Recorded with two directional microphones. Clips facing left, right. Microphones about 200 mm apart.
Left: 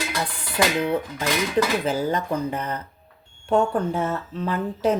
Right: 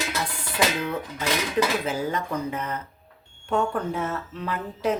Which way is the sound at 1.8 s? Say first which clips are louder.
Left 4 dB; 35° left (ahead or behind).